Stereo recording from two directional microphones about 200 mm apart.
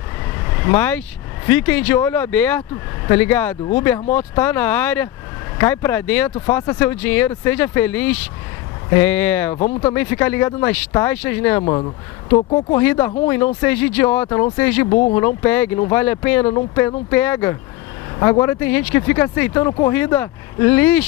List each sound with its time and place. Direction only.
0.4 s speech: 15° left (ahead or behind)